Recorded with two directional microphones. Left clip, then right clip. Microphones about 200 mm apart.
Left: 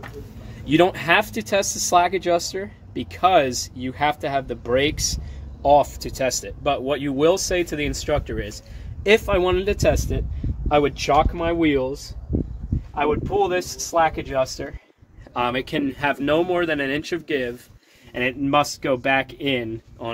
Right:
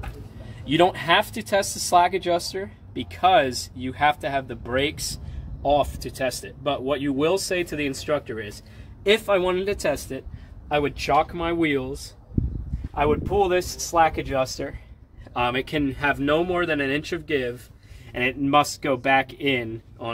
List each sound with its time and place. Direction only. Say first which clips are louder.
0.7 s speech: left 2 dB; 20° left (ahead or behind)
12.9 s speech: even; 15° right (ahead or behind)
15.3 s speech: left 1 dB; 30° left (ahead or behind)
18.1 s speech: even; 20° left (ahead or behind)